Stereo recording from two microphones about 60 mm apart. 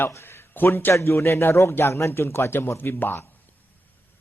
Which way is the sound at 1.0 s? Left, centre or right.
Left.